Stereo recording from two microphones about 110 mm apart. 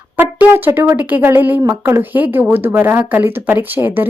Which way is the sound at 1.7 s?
20° right (ahead or behind).